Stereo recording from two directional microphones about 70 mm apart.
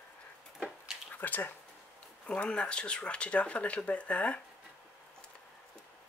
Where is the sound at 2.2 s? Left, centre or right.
Centre.